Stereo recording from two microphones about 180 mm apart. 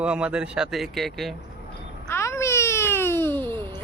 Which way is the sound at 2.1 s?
15° left (ahead or behind).